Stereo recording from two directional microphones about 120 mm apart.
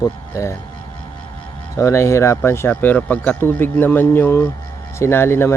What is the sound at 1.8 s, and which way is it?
A man's voice, 25° left (ahead or behind).